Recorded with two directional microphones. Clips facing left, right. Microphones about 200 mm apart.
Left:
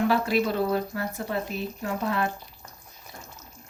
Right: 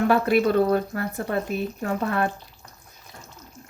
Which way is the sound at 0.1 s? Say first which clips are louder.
Right 5 dB; 55° right (ahead or behind).